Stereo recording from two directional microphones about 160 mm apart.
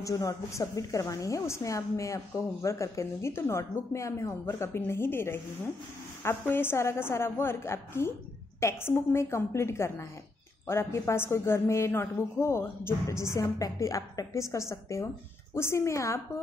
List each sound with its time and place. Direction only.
0.0 s a woman's voice: 20° left (ahead or behind)